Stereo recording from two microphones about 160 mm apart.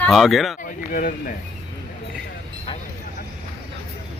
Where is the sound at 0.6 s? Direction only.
55° left (ahead or behind).